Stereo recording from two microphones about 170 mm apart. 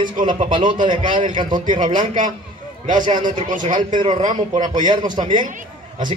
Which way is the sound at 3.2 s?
50° right (ahead or behind).